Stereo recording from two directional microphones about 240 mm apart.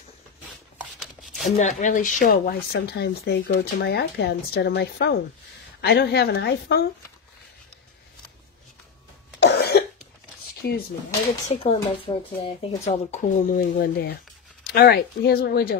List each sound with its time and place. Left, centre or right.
1.6 s speech: left
9.4 s cough: left
10.6 s speech: left
11.4 s speech: left